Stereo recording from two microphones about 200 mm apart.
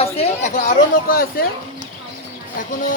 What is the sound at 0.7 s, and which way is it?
Speech, 45° left (ahead or behind).